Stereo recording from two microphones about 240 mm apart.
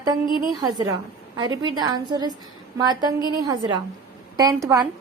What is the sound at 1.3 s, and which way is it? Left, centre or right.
A woman's voice, centre.